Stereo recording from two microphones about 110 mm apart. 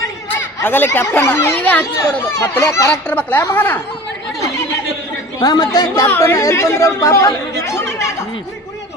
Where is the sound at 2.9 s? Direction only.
15° left (ahead or behind).